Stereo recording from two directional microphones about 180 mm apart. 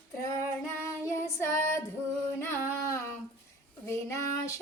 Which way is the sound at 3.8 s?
15° left (ahead or behind).